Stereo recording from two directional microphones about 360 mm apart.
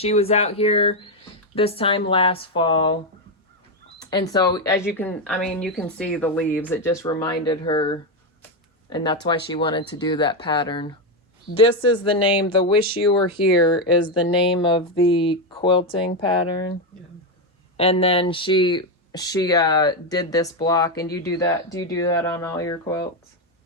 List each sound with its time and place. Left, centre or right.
0.0 s speech: centre
4.0 s speech: centre
17.7 s speech: centre